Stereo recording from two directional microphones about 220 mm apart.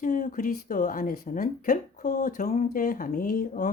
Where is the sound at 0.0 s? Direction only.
35° left (ahead or behind).